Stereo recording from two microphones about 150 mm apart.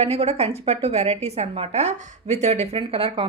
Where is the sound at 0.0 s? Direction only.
40° right (ahead or behind).